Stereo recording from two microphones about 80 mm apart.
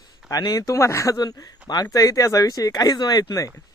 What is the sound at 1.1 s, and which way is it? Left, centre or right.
Speech, left.